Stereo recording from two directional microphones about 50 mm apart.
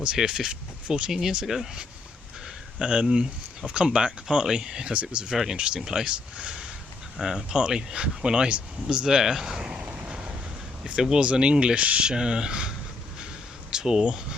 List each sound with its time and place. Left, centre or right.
0.2 s speech: centre
2.7 s speech: centre
5.3 s speech: centre
5.5 s speech: centre
9.0 s speech: centre
9.8 s vehicle: right
10.1 s vehicle: centre
10.8 s speech: centre